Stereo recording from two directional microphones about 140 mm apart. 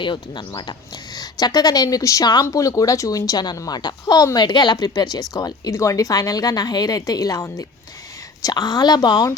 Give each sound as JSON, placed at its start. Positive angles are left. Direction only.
{"t": 0.0, "sound": "speech", "side_deg": 35}